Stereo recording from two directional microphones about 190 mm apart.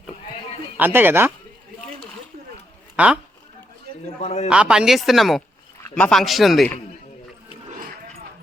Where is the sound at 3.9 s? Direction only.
50° right (ahead or behind).